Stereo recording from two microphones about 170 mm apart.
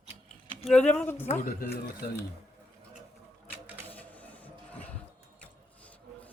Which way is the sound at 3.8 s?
10° left (ahead or behind).